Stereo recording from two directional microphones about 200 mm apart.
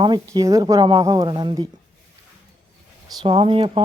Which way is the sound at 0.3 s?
15° right (ahead or behind).